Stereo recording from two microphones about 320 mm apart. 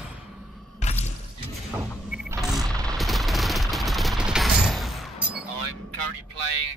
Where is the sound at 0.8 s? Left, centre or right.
Left.